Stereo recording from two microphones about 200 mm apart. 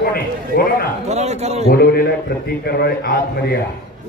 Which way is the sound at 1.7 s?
50° left (ahead or behind).